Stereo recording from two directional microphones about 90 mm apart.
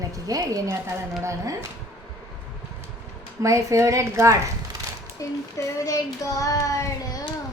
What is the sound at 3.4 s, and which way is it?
A woman's voice, 35° right (ahead or behind).